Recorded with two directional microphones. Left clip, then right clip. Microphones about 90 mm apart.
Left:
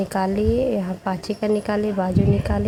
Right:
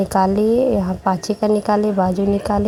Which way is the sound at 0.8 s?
25° right (ahead or behind).